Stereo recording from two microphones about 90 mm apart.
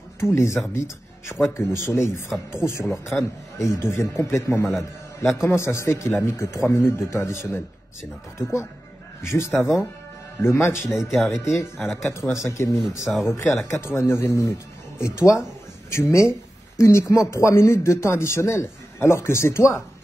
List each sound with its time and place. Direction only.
0.2 s a man's voice: 30° left (ahead or behind)
11.1 s speech: centre (ahead or behind)
11.3 s a man's voice: 35° left (ahead or behind)